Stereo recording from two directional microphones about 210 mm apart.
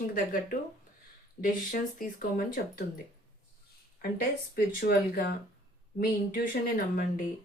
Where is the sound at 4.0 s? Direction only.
45° left (ahead or behind).